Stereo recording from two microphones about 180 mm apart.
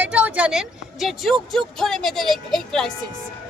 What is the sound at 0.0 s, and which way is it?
A woman's voice, 5° right (ahead or behind).